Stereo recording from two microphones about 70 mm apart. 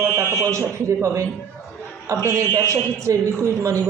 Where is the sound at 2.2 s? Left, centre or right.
Right.